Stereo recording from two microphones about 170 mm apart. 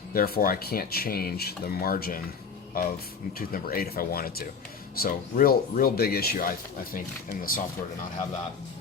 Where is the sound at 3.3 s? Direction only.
60° left (ahead or behind).